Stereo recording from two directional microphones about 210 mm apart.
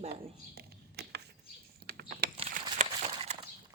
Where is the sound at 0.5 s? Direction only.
50° right (ahead or behind).